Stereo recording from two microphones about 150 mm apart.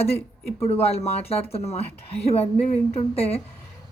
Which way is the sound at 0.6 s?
45° left (ahead or behind).